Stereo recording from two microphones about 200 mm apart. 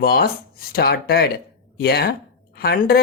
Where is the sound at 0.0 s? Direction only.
50° left (ahead or behind).